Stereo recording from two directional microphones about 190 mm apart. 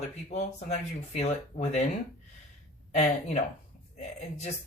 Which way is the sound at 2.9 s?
35° left (ahead or behind).